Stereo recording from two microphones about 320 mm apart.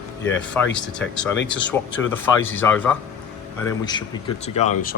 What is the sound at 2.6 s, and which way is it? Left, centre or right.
Speech, centre.